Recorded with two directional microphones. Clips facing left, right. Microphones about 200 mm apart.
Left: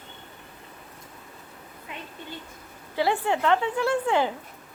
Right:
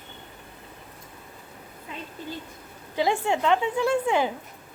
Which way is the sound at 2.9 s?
15° right (ahead or behind).